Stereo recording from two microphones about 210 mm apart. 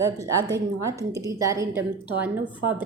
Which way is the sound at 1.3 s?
15° right (ahead or behind).